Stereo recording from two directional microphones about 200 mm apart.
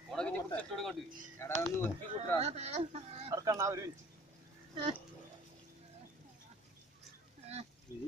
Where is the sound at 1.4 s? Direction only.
15° left (ahead or behind).